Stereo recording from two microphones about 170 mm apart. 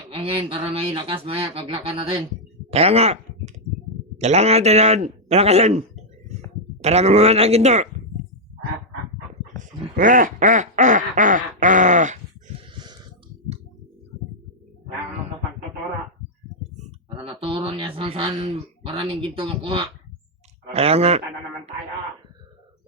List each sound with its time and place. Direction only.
0.2 s speech: 30° right (ahead or behind)
6.8 s speech: 40° right (ahead or behind)
9.9 s quack: 50° right (ahead or behind)
12.7 s a sound: 25° right (ahead or behind)
17.2 s speech: 30° right (ahead or behind)